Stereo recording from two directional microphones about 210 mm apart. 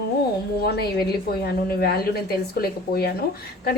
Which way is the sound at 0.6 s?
50° left (ahead or behind).